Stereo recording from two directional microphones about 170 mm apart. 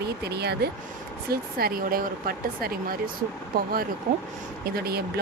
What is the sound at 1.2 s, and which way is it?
Speech, 60° right (ahead or behind).